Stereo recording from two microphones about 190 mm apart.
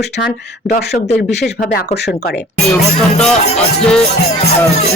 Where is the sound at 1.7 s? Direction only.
60° left (ahead or behind).